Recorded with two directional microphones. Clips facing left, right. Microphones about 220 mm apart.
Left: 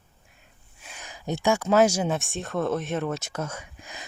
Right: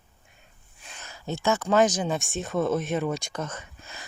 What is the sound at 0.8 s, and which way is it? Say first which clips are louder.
Speech: left 2 dB; 10° left (ahead or behind).